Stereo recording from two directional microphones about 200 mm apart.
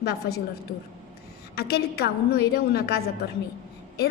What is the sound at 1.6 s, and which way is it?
A woman's voice, 55° left (ahead or behind).